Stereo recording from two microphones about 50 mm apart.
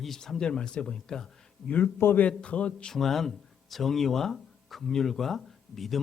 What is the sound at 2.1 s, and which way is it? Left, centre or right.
Speech, left.